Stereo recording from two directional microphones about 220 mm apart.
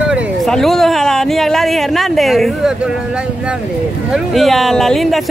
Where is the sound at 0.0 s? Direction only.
Centre (ahead or behind).